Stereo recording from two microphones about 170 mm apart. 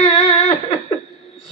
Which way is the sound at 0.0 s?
40° left (ahead or behind).